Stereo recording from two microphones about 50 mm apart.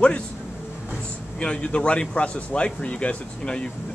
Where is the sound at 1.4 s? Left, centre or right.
Left.